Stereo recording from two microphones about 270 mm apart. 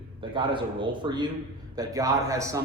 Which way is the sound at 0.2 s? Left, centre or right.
Centre.